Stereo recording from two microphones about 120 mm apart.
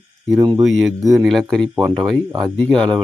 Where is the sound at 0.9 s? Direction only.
30° right (ahead or behind).